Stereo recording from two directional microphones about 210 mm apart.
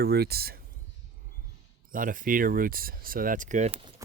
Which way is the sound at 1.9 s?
40° right (ahead or behind).